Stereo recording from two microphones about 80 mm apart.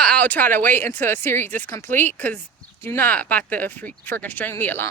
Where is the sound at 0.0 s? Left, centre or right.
Centre.